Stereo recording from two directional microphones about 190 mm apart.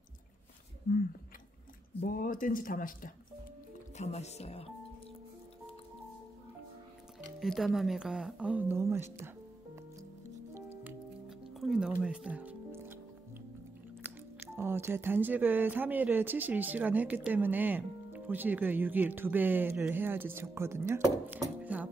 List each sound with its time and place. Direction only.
2.0 s speech: 45° left (ahead or behind)
4.0 s speech: 35° left (ahead or behind)
7.3 s speech: centre (ahead or behind)
10.5 s music: 10° right (ahead or behind)
14.4 s speech: 15° right (ahead or behind)